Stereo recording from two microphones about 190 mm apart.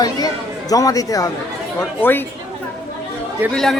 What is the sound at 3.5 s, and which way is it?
Speech, 5° left (ahead or behind).